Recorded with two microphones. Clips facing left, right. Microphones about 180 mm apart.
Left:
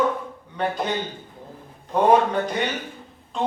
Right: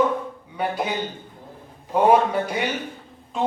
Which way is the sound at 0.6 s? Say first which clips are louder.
Even; 10° right (ahead or behind).